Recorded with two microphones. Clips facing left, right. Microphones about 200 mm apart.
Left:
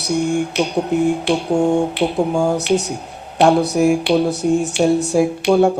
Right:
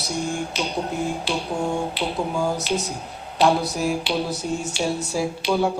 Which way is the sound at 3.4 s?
65° left (ahead or behind).